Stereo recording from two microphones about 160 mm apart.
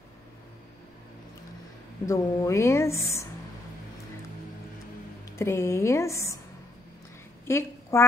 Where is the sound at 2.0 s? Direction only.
20° left (ahead or behind).